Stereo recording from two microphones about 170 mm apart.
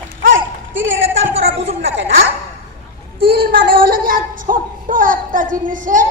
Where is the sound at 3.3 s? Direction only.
65° right (ahead or behind).